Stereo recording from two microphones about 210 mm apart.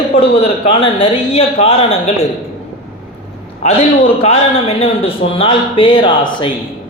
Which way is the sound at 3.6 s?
30° left (ahead or behind).